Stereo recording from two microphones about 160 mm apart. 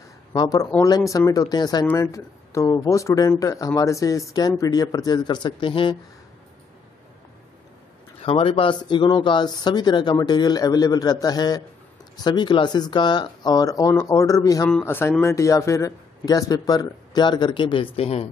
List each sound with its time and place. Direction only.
0.3 s speech: 25° left (ahead or behind)
8.2 s speech: 35° left (ahead or behind)